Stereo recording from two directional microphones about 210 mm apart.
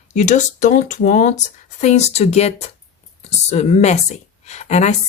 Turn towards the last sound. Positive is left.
turn(degrees=30)  # may be behind; listen again after turning